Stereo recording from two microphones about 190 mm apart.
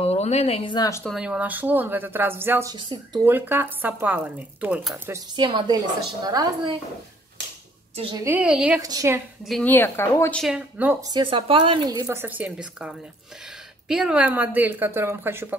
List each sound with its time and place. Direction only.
0.0 s speech: 35° left (ahead or behind)
1.0 s speech: 5° right (ahead or behind)
2.7 s speech: 25° right (ahead or behind)
3.3 s speech: 10° right (ahead or behind)
5.3 s speech: 25° right (ahead or behind)
7.9 s a woman's voice: 30° right (ahead or behind)
8.2 s speech: 10° right (ahead or behind)
8.8 s speech: 15° right (ahead or behind)
9.5 s a woman's voice: 10° left (ahead or behind)
10.4 s speech: 5° right (ahead or behind)
11.1 s speech: 25° right (ahead or behind)